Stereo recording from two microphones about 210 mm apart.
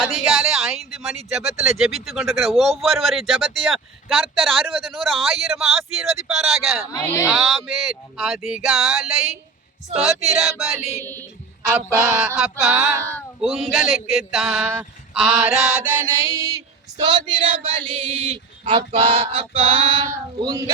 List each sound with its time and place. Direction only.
0.3 s speech: centre (ahead or behind)
6.9 s speech: 15° left (ahead or behind)
7.3 s speech: centre (ahead or behind)
11.0 s speech: 10° left (ahead or behind)
11.6 s speech: 5° right (ahead or behind)
15.1 s a sound: centre (ahead or behind); by 20.7 s 20° right (ahead or behind)